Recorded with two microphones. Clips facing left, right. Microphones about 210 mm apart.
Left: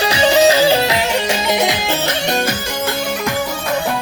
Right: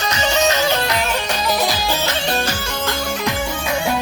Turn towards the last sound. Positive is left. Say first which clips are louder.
# left 2 dB
turn(degrees=20)  # may be behind; listen again after turning